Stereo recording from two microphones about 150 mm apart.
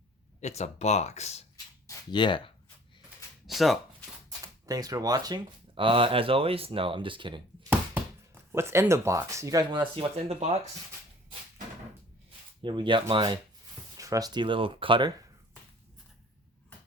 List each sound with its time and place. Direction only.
0.4 s speech: 50° left (ahead or behind)
1.9 s speech: 30° left (ahead or behind)
3.4 s speech: centre (ahead or behind)
4.6 s speech: 25° right (ahead or behind)
8.4 s speech: 15° right (ahead or behind)
9.9 s speech: 40° right (ahead or behind)
12.6 s speech: 35° right (ahead or behind)